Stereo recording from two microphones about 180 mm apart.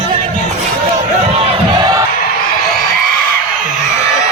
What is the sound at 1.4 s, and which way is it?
Crowd, 20° right (ahead or behind).